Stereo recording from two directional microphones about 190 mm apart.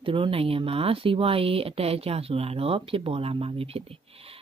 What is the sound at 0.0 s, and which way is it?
Speech, 25° right (ahead or behind).